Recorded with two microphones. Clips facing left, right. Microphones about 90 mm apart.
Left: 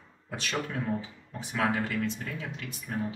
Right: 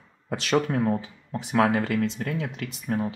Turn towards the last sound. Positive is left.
turn(degrees=-65)  # may be behind; listen again after turning